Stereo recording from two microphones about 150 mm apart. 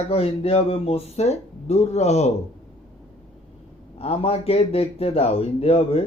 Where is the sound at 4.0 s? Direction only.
40° left (ahead or behind).